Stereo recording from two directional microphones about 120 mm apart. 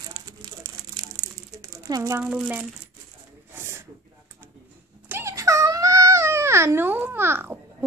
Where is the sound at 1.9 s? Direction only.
25° right (ahead or behind).